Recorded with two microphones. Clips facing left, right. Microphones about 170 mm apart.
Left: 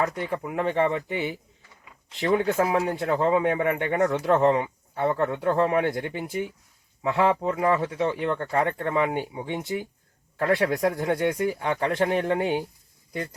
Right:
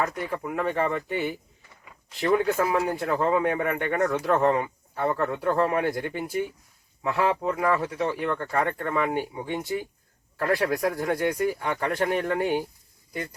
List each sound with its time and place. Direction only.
0.0 s speech: 20° left (ahead or behind)